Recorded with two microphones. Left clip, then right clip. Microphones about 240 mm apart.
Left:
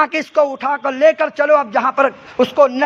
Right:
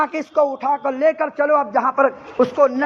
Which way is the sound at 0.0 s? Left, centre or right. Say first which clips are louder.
Left 3 dB; left.